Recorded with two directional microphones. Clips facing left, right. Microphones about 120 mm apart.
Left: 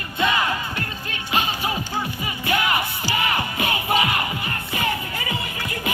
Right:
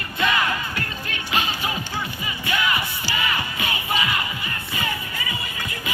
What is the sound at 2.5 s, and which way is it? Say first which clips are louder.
Music: left 2 dB; 50° left (ahead or behind).